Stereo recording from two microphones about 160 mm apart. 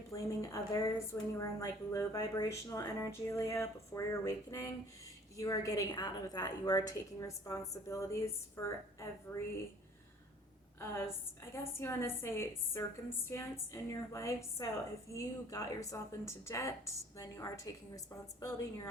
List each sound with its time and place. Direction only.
0.1 s a woman's voice: 20° left (ahead or behind)
10.8 s a woman's voice: 15° left (ahead or behind)